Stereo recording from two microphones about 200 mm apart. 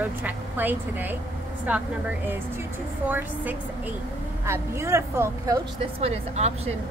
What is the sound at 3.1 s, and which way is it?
Speech, 10° right (ahead or behind).